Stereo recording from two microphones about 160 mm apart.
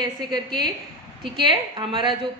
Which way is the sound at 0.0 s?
30° right (ahead or behind).